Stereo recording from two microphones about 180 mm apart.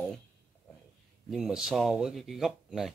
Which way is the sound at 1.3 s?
Centre (ahead or behind).